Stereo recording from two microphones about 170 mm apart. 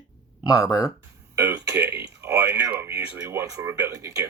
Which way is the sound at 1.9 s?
75° right (ahead or behind).